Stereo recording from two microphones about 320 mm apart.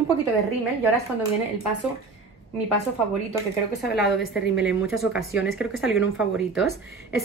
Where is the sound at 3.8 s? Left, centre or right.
Left.